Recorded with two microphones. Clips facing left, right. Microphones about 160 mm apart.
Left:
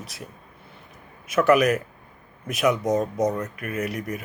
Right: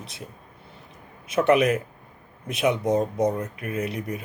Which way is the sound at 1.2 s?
30° right (ahead or behind).